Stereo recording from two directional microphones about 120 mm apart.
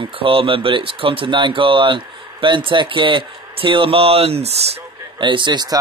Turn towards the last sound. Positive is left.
turn(degrees=-35)  # may be behind; listen again after turning